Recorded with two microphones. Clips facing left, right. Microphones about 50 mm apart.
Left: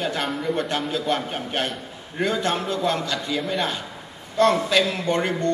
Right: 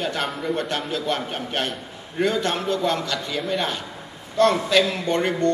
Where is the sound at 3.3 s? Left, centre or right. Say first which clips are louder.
Even; centre.